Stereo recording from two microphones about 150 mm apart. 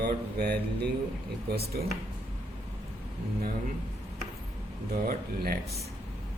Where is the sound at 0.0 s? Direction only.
90° right.